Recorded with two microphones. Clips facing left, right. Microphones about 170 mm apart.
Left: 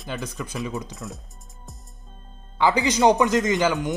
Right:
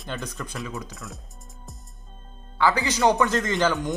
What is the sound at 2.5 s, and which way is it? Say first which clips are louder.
Speech: left 2 dB; 20° left (ahead or behind).